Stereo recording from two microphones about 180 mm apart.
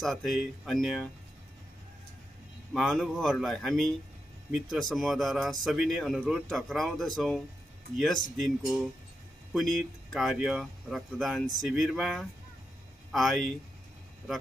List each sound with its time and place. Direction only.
0.0 s speech: centre (ahead or behind)
2.7 s speech: centre (ahead or behind)